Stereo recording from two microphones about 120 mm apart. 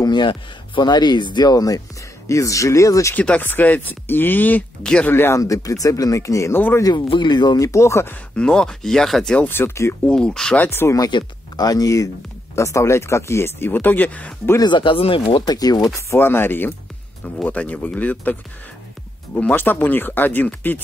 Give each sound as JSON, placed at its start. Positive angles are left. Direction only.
{"t": 0.0, "sound": "speech", "side_deg": 40}
{"t": 3.2, "sound": "speech", "side_deg": 15}
{"t": 5.1, "sound": "speech", "side_deg": 20}
{"t": 6.8, "sound": "speech", "side_deg": 40}
{"t": 8.4, "sound": "speech", "side_deg": 5}
{"t": 10.0, "sound": "speech", "side_deg": 5}
{"t": 11.0, "sound": "speech", "side_deg": 35}
{"t": 14.6, "sound": "speech", "side_deg": 40}
{"t": 15.4, "sound": "speech", "side_deg": 30}
{"t": 16.2, "sound": "speech", "side_deg": 20}